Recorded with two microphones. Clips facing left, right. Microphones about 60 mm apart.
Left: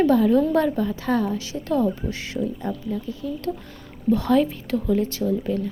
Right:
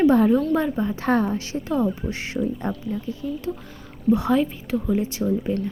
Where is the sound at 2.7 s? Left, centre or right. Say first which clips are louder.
Even; centre.